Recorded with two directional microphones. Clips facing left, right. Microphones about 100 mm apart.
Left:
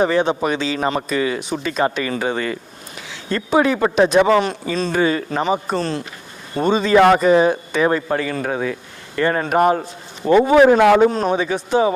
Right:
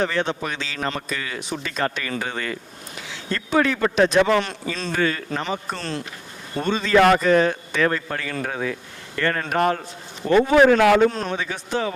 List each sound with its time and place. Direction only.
0.0 s a man's voice: 10° left (ahead or behind)